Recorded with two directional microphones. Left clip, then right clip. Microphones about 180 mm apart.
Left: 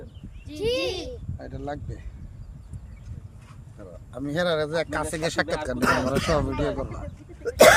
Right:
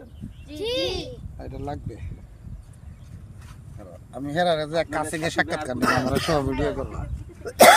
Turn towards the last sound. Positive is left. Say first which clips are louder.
# right 1 dB
turn(degrees=0)  # may be behind; listen again after turning